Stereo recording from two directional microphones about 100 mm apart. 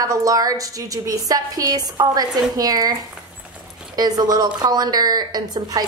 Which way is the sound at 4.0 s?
40° right (ahead or behind).